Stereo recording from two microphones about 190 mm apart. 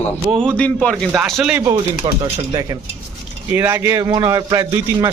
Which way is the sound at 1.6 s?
20° right (ahead or behind).